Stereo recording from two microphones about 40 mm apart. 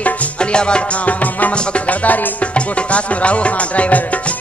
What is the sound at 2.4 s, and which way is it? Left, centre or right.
Music, left.